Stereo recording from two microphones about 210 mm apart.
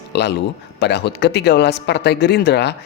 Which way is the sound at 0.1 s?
55° left (ahead or behind).